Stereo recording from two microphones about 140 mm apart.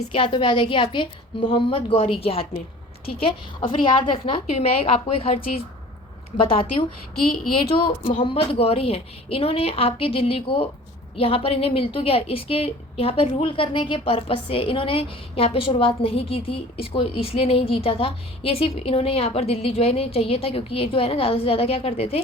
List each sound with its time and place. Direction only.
0.1 s a woman's voice: 40° left (ahead or behind)
3.7 s a woman's voice: 40° left (ahead or behind)
4.4 s a woman's voice: 50° left (ahead or behind)
8.0 s a woman's voice: 40° left (ahead or behind)